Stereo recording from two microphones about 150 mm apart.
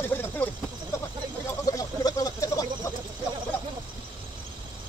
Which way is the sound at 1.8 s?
20° left (ahead or behind).